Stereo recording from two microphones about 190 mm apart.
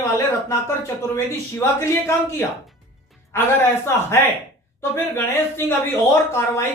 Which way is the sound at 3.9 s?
15° left (ahead or behind).